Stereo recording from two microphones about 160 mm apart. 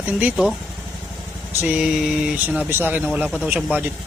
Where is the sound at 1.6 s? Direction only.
5° right (ahead or behind).